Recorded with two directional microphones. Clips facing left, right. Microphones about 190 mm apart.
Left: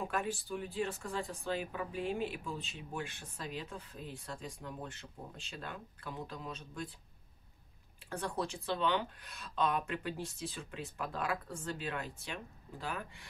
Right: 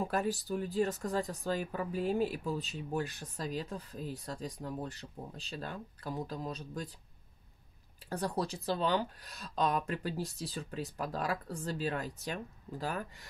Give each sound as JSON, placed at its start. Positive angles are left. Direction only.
{"t": 0.0, "sound": "speech", "side_deg": -40}
{"t": 8.1, "sound": "speech", "side_deg": -40}